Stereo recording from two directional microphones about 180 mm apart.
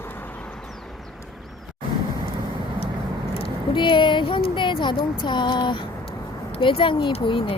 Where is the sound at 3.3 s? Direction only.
25° left (ahead or behind).